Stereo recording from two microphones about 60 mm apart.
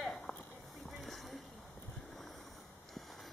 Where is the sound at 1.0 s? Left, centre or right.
Centre.